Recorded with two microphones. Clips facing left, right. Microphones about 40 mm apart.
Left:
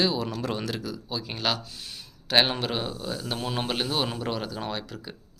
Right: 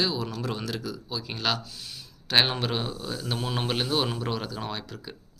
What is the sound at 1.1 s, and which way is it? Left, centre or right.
A man's voice, centre.